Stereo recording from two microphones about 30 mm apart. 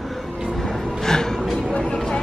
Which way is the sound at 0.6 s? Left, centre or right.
Centre.